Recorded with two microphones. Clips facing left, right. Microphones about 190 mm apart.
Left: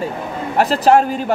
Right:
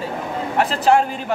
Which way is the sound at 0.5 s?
40° left (ahead or behind).